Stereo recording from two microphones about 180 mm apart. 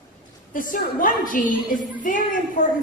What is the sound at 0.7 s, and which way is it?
A woman's voice, 50° left (ahead or behind).